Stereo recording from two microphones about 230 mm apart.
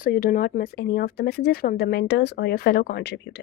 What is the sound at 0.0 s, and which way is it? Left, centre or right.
Speech, left.